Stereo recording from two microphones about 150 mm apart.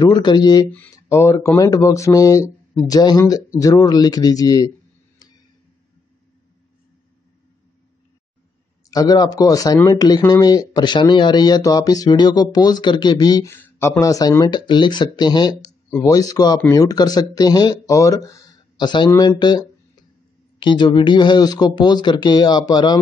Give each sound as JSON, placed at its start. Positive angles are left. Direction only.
{"t": 0.0, "sound": "speech", "side_deg": 30}
{"t": 8.9, "sound": "speech", "side_deg": 25}